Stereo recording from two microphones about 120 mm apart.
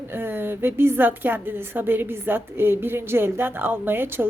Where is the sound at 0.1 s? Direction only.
20° right (ahead or behind).